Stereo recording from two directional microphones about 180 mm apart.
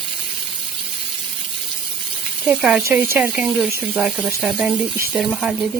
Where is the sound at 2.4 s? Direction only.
Centre (ahead or behind).